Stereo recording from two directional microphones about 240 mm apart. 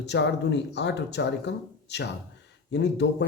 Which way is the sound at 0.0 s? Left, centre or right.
Left.